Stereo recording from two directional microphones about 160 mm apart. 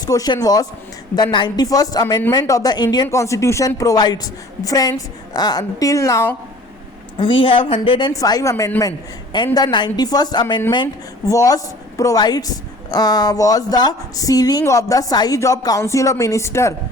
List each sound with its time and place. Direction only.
0.0 s speech: 25° left (ahead or behind)
7.2 s speech: 30° left (ahead or behind)